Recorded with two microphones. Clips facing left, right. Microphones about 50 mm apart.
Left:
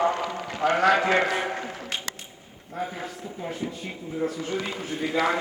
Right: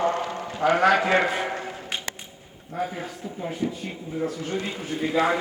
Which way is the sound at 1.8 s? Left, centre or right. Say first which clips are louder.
Right 1 dB; centre.